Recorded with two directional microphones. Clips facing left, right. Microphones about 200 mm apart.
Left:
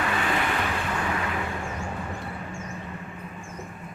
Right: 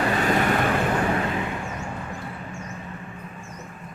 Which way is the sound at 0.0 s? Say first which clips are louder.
Right 5 dB; 40° right (ahead or behind).